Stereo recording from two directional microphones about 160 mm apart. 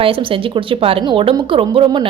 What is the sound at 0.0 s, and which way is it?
A woman's voice, 35° right (ahead or behind).